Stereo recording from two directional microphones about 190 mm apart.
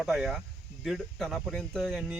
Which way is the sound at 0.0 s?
Centre (ahead or behind).